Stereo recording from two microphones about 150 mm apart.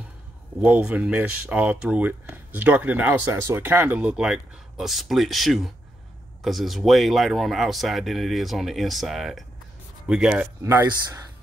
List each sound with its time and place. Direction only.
0.6 s speech: 10° right (ahead or behind)